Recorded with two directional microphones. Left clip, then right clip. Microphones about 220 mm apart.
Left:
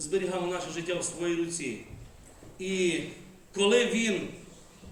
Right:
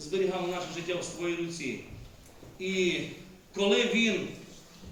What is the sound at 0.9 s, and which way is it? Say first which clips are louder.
A man's voice: left 2 dB; 50° left (ahead or behind).